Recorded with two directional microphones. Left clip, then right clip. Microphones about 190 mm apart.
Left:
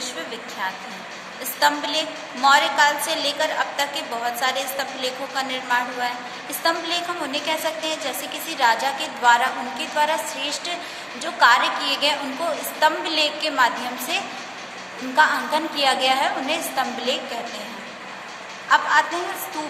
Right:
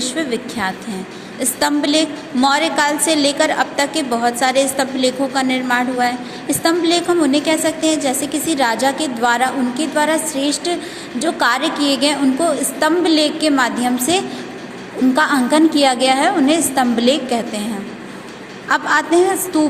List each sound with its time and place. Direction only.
0.0 s a sound: 40° right (ahead or behind)
1.4 s a woman's voice: 40° right (ahead or behind)
18.7 s a woman's voice: 40° right (ahead or behind)